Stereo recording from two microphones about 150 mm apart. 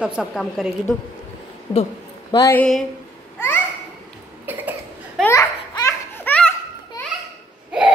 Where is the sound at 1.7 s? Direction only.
40° left (ahead or behind).